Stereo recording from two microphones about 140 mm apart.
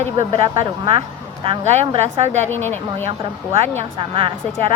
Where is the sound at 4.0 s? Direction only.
40° right (ahead or behind).